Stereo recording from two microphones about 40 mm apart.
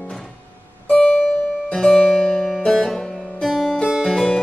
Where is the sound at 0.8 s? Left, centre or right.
Left.